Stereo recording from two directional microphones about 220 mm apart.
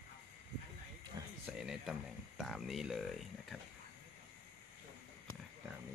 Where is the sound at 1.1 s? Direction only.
20° right (ahead or behind).